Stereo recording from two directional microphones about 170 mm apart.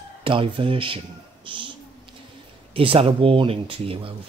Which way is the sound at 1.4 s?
30° right (ahead or behind).